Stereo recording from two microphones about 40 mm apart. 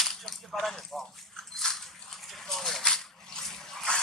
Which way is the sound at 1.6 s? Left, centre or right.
Centre.